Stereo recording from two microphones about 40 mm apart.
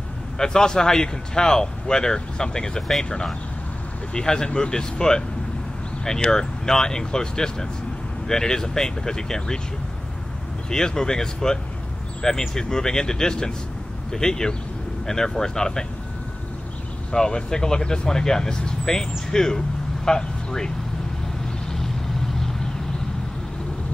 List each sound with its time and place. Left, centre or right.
0.4 s speech: centre
6.2 s speech: centre
10.7 s speech: centre
17.1 s speech: centre
21.7 s vehicle: centre